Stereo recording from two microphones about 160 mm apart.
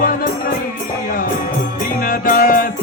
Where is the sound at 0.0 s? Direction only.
65° left (ahead or behind).